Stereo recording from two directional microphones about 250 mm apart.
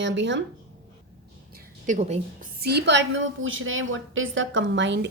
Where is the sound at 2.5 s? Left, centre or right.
Right.